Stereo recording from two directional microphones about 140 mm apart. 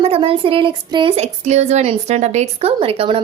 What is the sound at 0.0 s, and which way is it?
Speech, 40° right (ahead or behind).